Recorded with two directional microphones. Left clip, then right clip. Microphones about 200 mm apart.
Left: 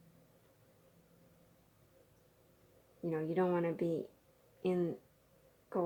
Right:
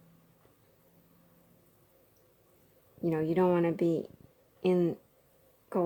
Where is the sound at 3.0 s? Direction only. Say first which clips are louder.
Right 7 dB; 45° right (ahead or behind).